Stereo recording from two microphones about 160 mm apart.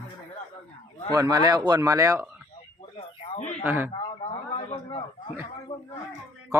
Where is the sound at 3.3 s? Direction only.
45° left (ahead or behind).